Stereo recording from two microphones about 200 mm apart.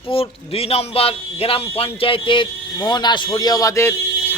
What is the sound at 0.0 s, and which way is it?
A man's voice, 30° left (ahead or behind).